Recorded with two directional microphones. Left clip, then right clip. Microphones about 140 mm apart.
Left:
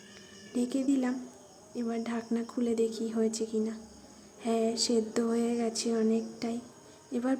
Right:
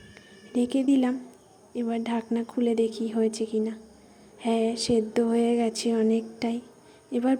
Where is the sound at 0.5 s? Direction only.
25° right (ahead or behind).